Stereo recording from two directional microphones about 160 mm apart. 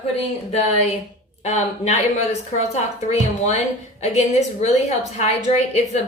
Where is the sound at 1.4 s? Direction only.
45° left (ahead or behind).